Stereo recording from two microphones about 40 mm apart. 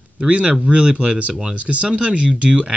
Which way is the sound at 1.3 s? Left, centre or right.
Right.